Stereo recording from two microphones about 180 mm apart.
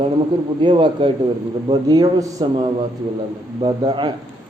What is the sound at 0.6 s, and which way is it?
A man's voice, 25° right (ahead or behind).